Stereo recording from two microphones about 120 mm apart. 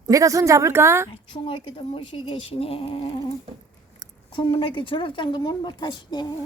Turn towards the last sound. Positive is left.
turn(degrees=40)  # may be behind; listen again after turning